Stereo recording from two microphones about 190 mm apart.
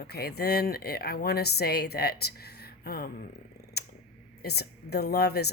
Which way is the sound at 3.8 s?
60° left (ahead or behind).